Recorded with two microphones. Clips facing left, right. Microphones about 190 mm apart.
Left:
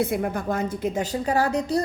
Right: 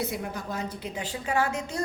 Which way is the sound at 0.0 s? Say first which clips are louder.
Left 8 dB; 55° left (ahead or behind).